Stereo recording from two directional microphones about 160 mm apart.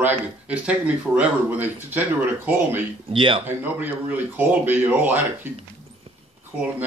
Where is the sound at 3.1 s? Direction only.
30° right (ahead or behind).